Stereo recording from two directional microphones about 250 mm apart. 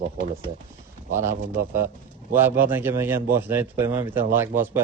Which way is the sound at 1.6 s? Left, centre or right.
Centre.